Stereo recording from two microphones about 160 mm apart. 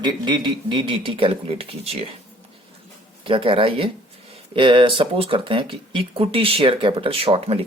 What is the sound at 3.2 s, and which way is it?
Speech, 35° right (ahead or behind).